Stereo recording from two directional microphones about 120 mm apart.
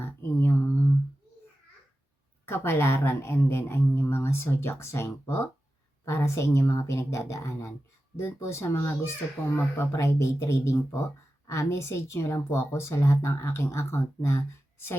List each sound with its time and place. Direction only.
0.0 s mantra: 20° left (ahead or behind)
2.5 s speech: 20° left (ahead or behind)